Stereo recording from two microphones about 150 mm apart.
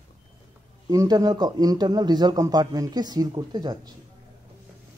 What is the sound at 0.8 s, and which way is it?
A man's voice, 25° right (ahead or behind).